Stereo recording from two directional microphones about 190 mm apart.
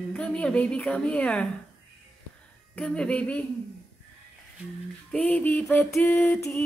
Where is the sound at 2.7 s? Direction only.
5° left (ahead or behind).